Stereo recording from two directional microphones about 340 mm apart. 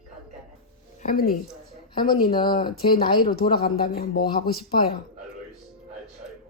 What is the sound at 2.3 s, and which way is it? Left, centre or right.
Speech, centre.